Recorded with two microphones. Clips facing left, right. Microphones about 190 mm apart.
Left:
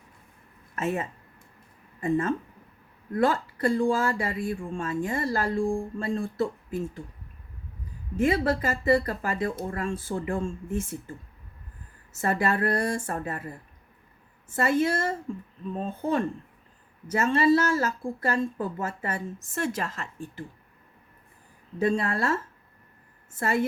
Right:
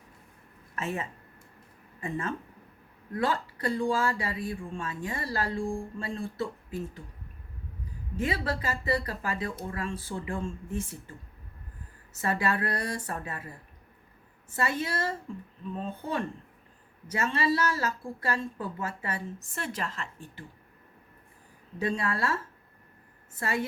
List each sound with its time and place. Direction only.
0.8 s a woman's voice: 45° left (ahead or behind)
8.2 s a woman's voice: 45° left (ahead or behind)
12.2 s a woman's voice: 45° left (ahead or behind)
14.5 s a woman's voice: 50° left (ahead or behind)
21.8 s a woman's voice: 45° left (ahead or behind)